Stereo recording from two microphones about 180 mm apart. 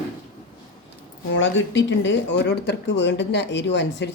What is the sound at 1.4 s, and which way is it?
Speech, 90° left.